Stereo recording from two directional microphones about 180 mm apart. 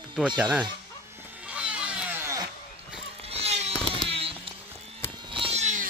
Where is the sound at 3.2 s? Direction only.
35° right (ahead or behind).